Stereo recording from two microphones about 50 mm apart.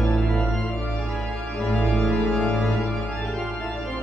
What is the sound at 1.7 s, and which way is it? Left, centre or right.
Organ, left.